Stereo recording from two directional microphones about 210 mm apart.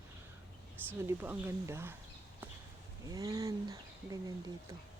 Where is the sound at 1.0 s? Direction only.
10° right (ahead or behind).